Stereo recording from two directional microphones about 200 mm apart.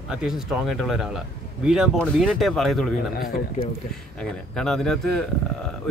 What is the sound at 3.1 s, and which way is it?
Speech, 45° left (ahead or behind).